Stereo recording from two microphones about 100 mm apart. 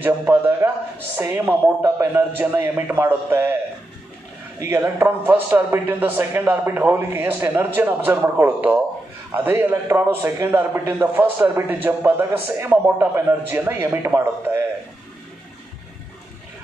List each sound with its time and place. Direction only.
0.0 s a man's voice: 20° right (ahead or behind)
4.6 s a man's voice: 30° right (ahead or behind)